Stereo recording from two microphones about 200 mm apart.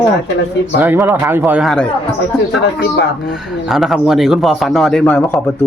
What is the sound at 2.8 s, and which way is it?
Speech, 60° left (ahead or behind).